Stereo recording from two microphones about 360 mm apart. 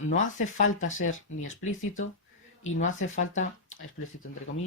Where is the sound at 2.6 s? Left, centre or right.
Left.